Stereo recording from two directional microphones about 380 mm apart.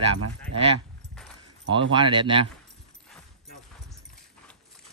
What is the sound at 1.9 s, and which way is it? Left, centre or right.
Speech, centre.